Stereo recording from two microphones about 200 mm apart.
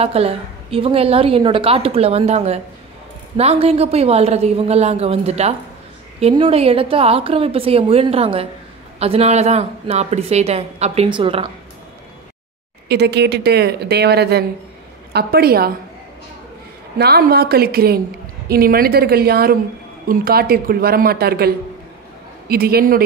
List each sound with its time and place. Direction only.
0.0 s a woman's voice: 30° right (ahead or behind)
12.8 s speech: 55° right (ahead or behind)
17.0 s speech: 50° right (ahead or behind)